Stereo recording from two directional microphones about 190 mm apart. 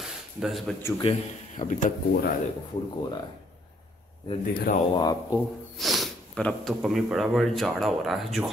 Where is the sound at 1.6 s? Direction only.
45° left (ahead or behind).